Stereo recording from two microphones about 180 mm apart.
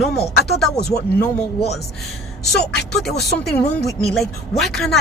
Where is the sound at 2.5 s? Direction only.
Centre (ahead or behind).